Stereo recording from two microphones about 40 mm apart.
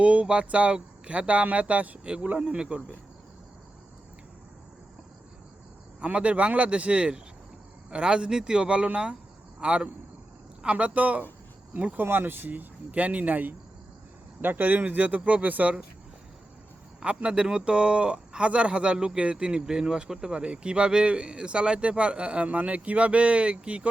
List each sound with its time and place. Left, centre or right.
0.0 s speech: right
2.5 s speech: right
6.1 s a man's voice: right
12.0 s speech: right
12.5 s speech: right
17.0 s speech: right